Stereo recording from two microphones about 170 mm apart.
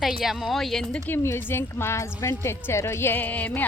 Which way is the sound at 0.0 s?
Centre (ahead or behind).